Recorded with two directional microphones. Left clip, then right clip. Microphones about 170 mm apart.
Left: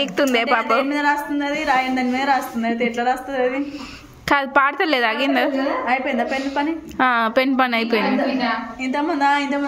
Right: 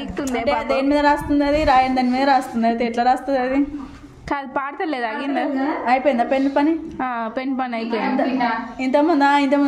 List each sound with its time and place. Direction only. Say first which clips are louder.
0.0 s a woman's voice: left 6 dB; 10° left (ahead or behind)
0.8 s a woman's voice: right 3 dB; 60° right (ahead or behind)
4.3 s a woman's voice: left 8 dB; 10° left (ahead or behind)
5.9 s a woman's voice: right 3 dB; 65° right (ahead or behind)
7.0 s a woman's voice: left 7 dB; 10° left (ahead or behind)
8.8 s a woman's voice: right 3 dB; 60° right (ahead or behind)